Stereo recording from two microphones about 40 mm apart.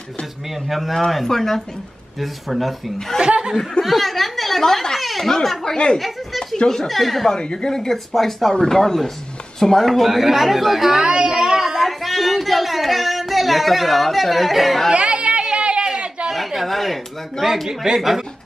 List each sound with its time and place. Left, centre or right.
0.7 s a woman's voice: centre
1.1 s a woman's voice: centre
3.1 s speech: centre
3.8 s a woman's voice: centre
5.9 s speech: centre
6.5 s a woman's voice: centre
7.3 s a woman's voice: centre
11.0 s a sound: right; by 14.9 s centre
15.0 s chatter: right
15.4 s a sound: right
16.3 s speech: centre
17.6 s speech: centre